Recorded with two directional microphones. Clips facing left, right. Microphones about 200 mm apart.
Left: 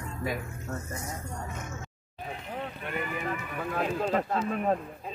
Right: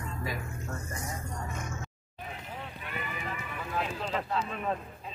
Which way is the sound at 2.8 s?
50° left (ahead or behind).